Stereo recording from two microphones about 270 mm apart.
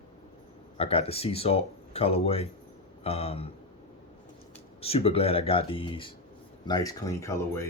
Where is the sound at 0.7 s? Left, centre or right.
Left.